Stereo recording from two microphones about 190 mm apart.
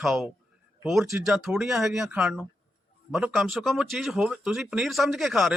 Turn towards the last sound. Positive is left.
turn(degrees=0)  # may be behind; listen again after turning